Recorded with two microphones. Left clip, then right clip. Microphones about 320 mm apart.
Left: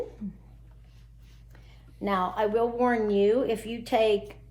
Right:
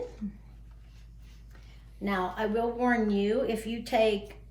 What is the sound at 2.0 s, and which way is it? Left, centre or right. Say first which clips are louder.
A woman's voice: left 4 dB; left.